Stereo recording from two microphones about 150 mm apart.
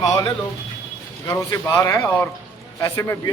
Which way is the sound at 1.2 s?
20° left (ahead or behind).